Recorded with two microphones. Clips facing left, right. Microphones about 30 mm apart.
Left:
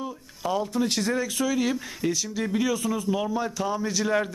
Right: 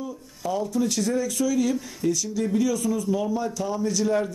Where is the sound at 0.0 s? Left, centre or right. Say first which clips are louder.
Even; left.